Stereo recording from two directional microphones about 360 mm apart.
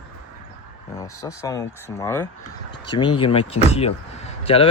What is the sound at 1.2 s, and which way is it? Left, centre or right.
Speech, centre.